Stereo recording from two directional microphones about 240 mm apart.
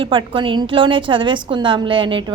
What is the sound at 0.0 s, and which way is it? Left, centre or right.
A woman's voice, right.